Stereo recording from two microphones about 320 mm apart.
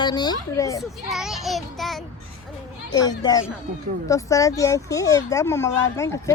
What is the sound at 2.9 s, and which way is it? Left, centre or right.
Speech, centre.